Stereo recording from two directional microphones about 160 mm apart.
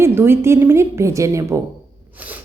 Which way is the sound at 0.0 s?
15° right (ahead or behind).